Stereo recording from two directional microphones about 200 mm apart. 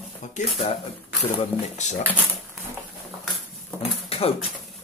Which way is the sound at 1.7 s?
35° left (ahead or behind).